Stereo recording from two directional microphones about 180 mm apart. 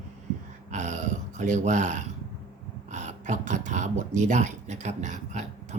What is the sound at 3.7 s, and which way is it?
Speech, 45° right (ahead or behind).